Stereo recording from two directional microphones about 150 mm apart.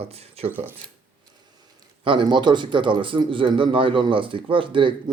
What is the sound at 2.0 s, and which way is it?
A man's voice, 35° right (ahead or behind).